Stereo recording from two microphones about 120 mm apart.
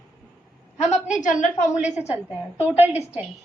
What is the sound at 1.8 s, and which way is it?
Speech, 65° left (ahead or behind).